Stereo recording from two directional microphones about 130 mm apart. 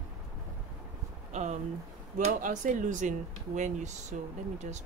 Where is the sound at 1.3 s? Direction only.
65° right (ahead or behind).